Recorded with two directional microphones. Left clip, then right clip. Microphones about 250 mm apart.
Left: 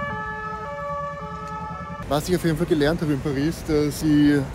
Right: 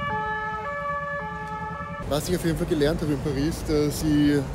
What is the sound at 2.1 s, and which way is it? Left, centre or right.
Speech, left.